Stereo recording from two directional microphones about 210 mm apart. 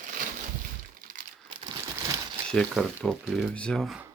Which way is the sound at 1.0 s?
45° right (ahead or behind).